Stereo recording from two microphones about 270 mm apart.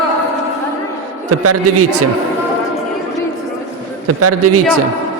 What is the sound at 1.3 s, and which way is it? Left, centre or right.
Speech, right.